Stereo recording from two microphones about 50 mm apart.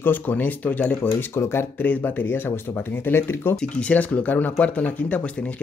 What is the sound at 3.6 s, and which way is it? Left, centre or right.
Speech, left.